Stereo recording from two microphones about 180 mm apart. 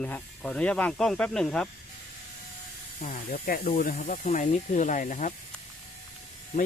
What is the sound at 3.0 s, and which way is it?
Speech, 50° left (ahead or behind).